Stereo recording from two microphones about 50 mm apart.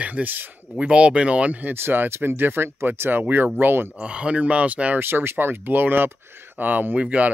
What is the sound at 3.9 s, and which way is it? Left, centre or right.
Speech, right.